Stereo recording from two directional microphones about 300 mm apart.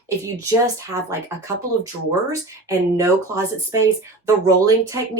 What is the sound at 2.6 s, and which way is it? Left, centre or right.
A woman's voice, centre.